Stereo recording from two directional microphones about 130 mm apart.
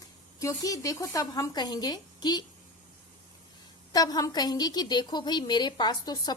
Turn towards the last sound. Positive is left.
turn(degrees=30)  # may be behind; listen again after turning